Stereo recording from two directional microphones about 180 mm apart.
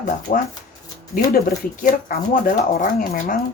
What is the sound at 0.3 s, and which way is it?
Speech, 50° left (ahead or behind).